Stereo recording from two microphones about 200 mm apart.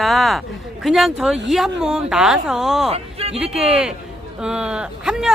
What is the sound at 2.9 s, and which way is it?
Speech, 30° right (ahead or behind).